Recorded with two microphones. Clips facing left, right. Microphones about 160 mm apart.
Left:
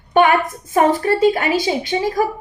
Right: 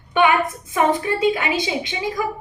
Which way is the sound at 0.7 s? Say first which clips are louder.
Left 4 dB; 45° left (ahead or behind).